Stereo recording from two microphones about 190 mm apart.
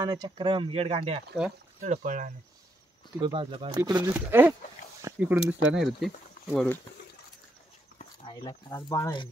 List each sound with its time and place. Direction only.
0.0 s speech: 20° right (ahead or behind)
1.8 s speech: 45° right (ahead or behind)
3.2 s speech: 25° right (ahead or behind); by 6.8 s 5° left (ahead or behind)
8.2 s speech: 25° left (ahead or behind)